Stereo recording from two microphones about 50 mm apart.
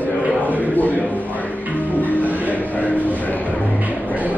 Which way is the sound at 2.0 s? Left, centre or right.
Left.